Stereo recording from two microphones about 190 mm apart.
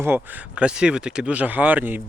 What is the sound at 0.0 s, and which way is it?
Speech, 10° right (ahead or behind).